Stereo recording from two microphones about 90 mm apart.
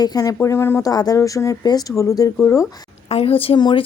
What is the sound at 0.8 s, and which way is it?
Speech, 45° left (ahead or behind).